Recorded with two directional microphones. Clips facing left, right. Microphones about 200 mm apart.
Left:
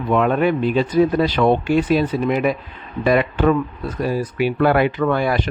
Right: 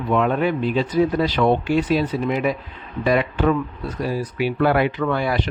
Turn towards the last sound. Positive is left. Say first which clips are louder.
# left 3 dB
turn(degrees=50)  # may be behind; listen again after turning